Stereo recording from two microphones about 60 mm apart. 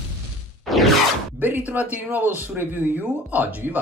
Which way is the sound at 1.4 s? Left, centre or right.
Right.